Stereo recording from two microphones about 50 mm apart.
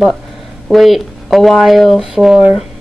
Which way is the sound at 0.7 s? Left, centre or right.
Centre.